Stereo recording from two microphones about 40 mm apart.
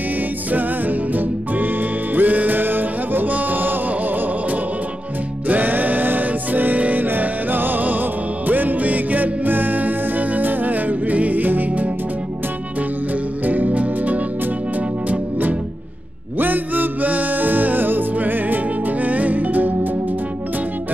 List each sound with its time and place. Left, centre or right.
0.5 s music: right
3.3 s music: right
13.5 s music: right